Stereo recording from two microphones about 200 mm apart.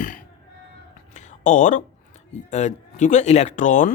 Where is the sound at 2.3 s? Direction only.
35° left (ahead or behind).